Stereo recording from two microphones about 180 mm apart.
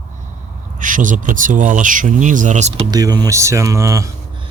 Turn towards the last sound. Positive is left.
turn(degrees=-15)  # may be behind; listen again after turning